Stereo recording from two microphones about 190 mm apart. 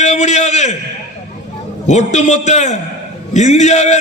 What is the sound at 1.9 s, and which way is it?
A man's voice, 40° left (ahead or behind).